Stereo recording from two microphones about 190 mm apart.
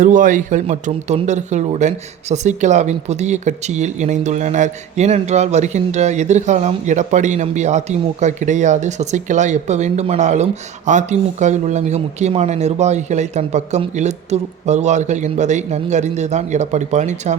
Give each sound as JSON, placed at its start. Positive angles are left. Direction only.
{"t": 0.0, "sound": "speech", "side_deg": -45}